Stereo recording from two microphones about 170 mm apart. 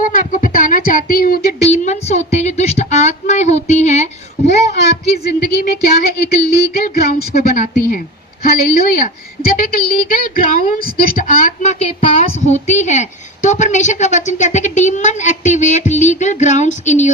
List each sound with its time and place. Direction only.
0.0 s a woman's voice: 50° left (ahead or behind)
1.6 s a sound: 40° left (ahead or behind)
4.4 s a woman's voice: 80° left; by 17.1 s 45° left (ahead or behind)